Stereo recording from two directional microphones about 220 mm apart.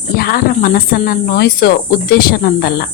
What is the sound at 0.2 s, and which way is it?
Speech, 40° left (ahead or behind).